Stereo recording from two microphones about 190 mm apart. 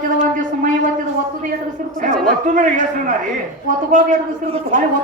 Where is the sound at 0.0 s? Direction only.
45° right (ahead or behind).